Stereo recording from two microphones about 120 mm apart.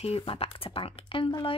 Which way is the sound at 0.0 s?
55° left (ahead or behind).